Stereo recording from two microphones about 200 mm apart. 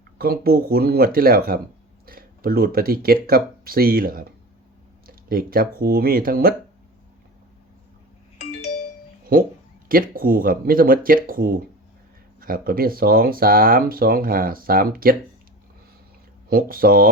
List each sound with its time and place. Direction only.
0.2 s speech: 50° right (ahead or behind)
9.3 s speech: 45° right (ahead or behind)
16.5 s speech: 45° right (ahead or behind)